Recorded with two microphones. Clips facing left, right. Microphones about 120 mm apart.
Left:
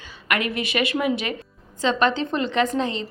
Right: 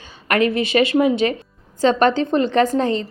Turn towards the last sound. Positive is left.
turn(degrees=-40)  # may be behind; listen again after turning